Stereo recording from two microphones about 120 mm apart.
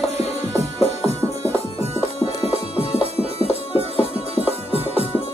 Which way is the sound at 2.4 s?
55° left (ahead or behind).